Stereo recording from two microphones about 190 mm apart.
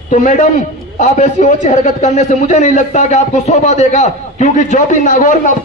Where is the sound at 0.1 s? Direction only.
40° left (ahead or behind).